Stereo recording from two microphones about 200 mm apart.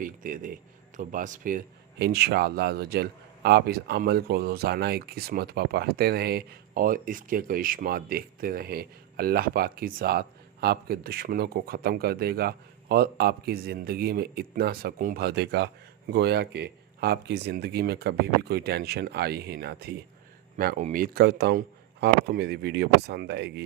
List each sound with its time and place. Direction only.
0.0 s speech: 45° right (ahead or behind)
20.7 s speech: 40° right (ahead or behind); by 23.6 s 55° right (ahead or behind)